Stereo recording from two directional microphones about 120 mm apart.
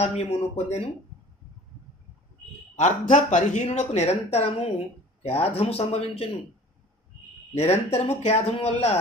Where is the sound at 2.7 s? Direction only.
75° left (ahead or behind); by 6.2 s 55° left (ahead or behind).